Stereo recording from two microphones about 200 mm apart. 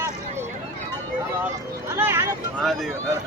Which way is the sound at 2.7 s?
Centre (ahead or behind).